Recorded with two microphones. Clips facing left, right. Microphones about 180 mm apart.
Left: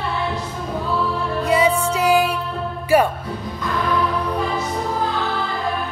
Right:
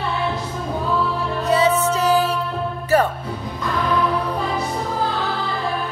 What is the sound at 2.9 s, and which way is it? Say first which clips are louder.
Speech: left 2 dB; 10° left (ahead or behind).